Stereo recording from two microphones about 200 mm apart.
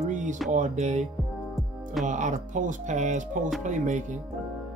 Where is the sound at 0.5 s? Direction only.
35° right (ahead or behind).